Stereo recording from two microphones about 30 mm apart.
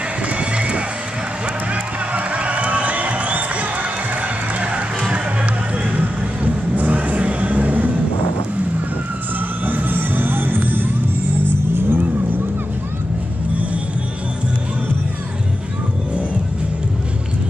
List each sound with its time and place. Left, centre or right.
0.3 s music: right
1.7 s run: right
5.9 s vehicle: right
9.7 s music: right
11.9 s vehicle: right